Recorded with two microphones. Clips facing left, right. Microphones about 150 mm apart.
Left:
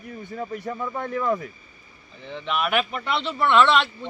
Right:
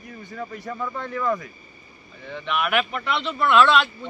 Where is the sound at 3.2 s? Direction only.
25° left (ahead or behind).